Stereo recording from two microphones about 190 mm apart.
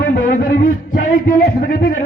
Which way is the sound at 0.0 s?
45° left (ahead or behind).